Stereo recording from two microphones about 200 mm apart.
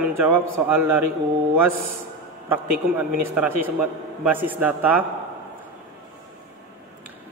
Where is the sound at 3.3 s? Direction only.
5° right (ahead or behind).